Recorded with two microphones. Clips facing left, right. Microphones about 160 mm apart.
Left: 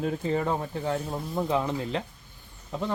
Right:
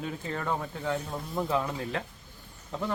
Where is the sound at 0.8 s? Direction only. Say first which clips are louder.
Left 1 dB; 35° left (ahead or behind).